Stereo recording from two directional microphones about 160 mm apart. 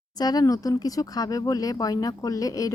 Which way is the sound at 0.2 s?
25° left (ahead or behind).